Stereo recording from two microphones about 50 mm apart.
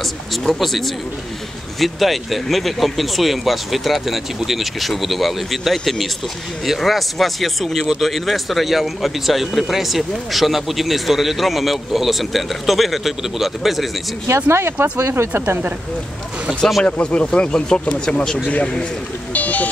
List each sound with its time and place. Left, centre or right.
0.0 s a sound: centre
0.6 s speech: centre
14.2 s speech: right
16.8 s speech: left
18.5 s a man's voice: left